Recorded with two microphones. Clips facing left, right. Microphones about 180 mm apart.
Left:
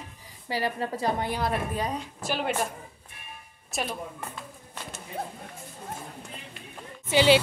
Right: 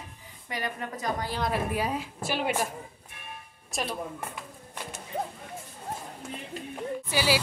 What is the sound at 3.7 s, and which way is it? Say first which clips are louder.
Speech: left 1 dB; centre (ahead or behind).